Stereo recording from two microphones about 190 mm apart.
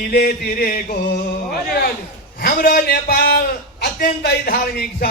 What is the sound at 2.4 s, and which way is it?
A man's voice, 50° left (ahead or behind).